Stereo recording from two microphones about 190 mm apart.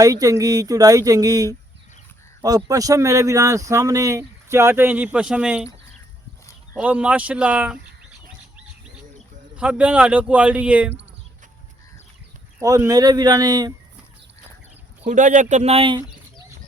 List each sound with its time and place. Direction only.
0.0 s speech: 20° right (ahead or behind)
2.6 s speech: 20° right (ahead or behind)
6.7 s speech: 10° right (ahead or behind)
9.6 s speech: 5° right (ahead or behind)
12.5 s speech: 15° right (ahead or behind)
15.0 s speech: 40° right (ahead or behind)